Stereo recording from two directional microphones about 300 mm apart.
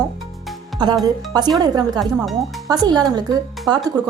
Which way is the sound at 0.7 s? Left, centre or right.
Centre.